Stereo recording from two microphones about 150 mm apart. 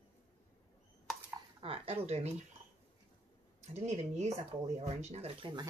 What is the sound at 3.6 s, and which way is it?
Speech, 45° right (ahead or behind).